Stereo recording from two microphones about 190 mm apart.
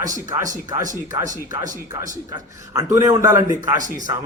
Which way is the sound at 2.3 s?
15° right (ahead or behind).